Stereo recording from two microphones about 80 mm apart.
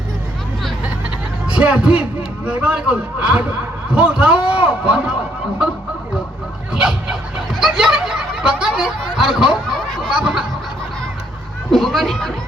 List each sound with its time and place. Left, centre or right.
1.5 s a man's voice: centre
6.7 s dog: centre
7.6 s snicker: centre
9.1 s a man's voice: centre
11.7 s speech: centre